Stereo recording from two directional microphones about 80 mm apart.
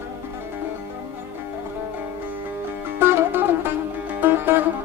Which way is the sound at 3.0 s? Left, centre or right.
Right.